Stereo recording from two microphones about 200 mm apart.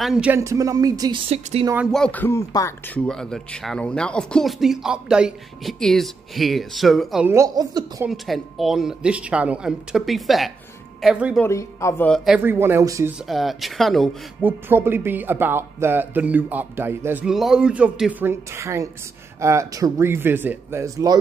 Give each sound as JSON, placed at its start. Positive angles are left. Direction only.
{"t": 0.0, "sound": "speech", "side_deg": -5}
{"t": 1.3, "sound": "speech", "side_deg": -30}
{"t": 1.9, "sound": "speech", "side_deg": 5}
{"t": 3.1, "sound": "speech", "side_deg": 5}
{"t": 7.3, "sound": "speech", "side_deg": -20}
{"t": 8.1, "sound": "speech", "side_deg": 0}
{"t": 11.4, "sound": "speech", "side_deg": 15}
{"t": 12.4, "sound": "speech", "side_deg": -10}
{"t": 13.3, "sound": "speech", "side_deg": 0}
{"t": 14.4, "sound": "speech", "side_deg": -10}